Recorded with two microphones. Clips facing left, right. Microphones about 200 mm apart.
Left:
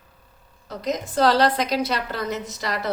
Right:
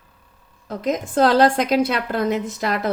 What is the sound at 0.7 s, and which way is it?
A woman's voice, 50° right (ahead or behind).